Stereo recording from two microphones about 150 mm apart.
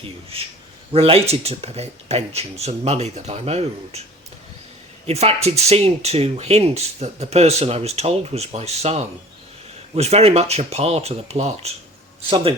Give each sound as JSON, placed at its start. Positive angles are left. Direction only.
{"t": 0.9, "sound": "speech", "side_deg": -40}
{"t": 5.0, "sound": "speech", "side_deg": -45}